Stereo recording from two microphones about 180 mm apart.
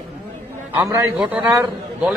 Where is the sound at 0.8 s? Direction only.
15° right (ahead or behind).